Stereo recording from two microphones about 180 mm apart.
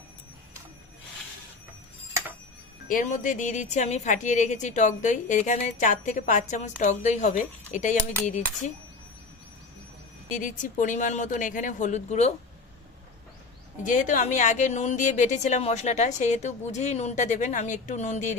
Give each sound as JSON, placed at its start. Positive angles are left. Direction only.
{"t": 2.9, "sound": "a woman's voice", "side_deg": 45}
{"t": 10.2, "sound": "a woman's voice", "side_deg": 45}
{"t": 13.8, "sound": "a woman's voice", "side_deg": 45}